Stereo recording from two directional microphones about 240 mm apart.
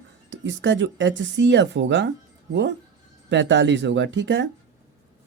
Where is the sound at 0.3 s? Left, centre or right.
Right.